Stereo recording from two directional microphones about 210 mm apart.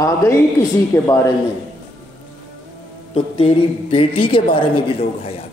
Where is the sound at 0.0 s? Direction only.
15° left (ahead or behind).